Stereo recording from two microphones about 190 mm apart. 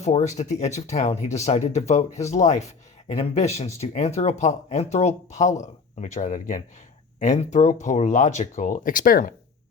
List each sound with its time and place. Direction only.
0.0 s speech: 35° left (ahead or behind)